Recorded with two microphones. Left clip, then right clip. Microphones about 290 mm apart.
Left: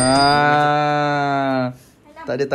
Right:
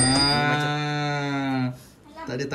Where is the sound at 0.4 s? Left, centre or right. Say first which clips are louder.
Left 9 dB; right.